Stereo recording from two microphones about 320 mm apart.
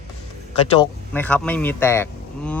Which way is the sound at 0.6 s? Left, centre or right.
Centre.